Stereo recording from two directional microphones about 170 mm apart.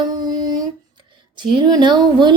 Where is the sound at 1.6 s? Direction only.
25° right (ahead or behind).